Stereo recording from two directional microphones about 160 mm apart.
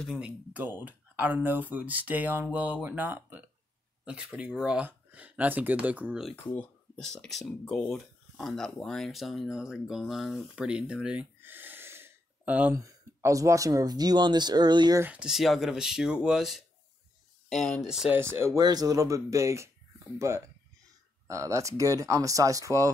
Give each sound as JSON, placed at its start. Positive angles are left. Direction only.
{"t": 0.0, "sound": "speech", "side_deg": -5}
{"t": 6.6, "sound": "speech", "side_deg": 5}
{"t": 12.8, "sound": "speech", "side_deg": -20}
{"t": 15.0, "sound": "speech", "side_deg": -5}
{"t": 18.2, "sound": "speech", "side_deg": -15}